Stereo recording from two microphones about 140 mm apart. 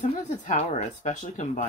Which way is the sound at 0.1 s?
55° left (ahead or behind).